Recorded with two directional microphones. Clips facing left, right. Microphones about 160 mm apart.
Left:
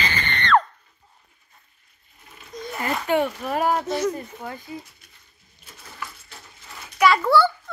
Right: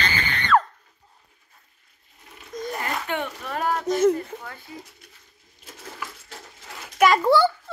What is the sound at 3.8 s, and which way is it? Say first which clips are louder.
Speech: right 5 dB; 45° right (ahead or behind).